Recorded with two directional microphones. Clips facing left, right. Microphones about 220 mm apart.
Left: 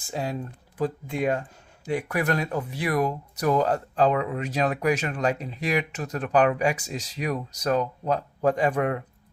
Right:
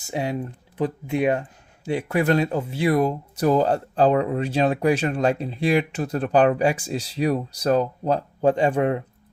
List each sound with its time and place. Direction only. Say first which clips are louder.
0.1 s speech: right 4 dB; 20° right (ahead or behind)